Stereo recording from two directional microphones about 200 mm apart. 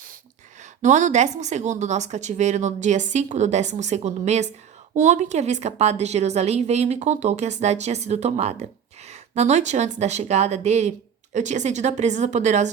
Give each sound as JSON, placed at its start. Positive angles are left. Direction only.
{"t": 0.6, "sound": "a woman's voice", "side_deg": -35}